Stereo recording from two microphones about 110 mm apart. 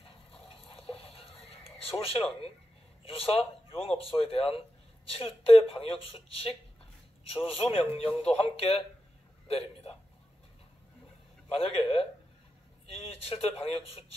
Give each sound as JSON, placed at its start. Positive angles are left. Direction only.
{"t": 0.0, "sound": "water", "side_deg": 60}
{"t": 0.9, "sound": "neigh", "side_deg": 60}
{"t": 3.0, "sound": "a man's voice", "side_deg": 60}
{"t": 11.6, "sound": "speech", "side_deg": 60}